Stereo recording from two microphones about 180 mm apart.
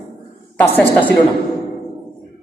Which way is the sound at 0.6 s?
10° left (ahead or behind).